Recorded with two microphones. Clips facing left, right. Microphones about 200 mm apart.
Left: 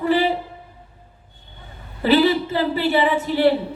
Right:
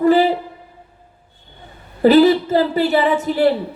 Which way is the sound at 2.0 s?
45° right (ahead or behind).